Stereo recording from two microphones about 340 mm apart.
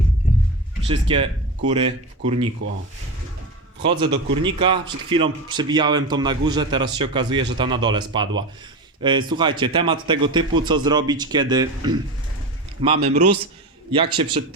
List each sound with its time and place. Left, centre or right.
0.9 s a man's voice: centre
4.0 s a man's voice: centre
13.1 s a man's voice: right
13.9 s a man's voice: centre